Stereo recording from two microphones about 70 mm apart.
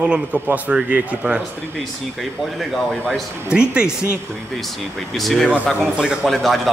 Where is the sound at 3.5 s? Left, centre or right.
Centre.